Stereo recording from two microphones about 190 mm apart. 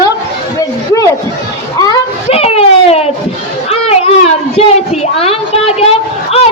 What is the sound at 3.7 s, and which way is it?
Children playing, 30° left (ahead or behind).